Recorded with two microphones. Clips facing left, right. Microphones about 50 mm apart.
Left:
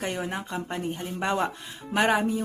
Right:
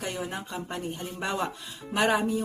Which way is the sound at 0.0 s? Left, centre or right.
Left.